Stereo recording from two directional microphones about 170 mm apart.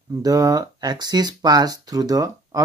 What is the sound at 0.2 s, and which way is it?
Speech, 20° right (ahead or behind).